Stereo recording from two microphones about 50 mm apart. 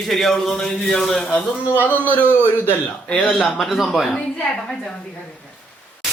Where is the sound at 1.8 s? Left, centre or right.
Left.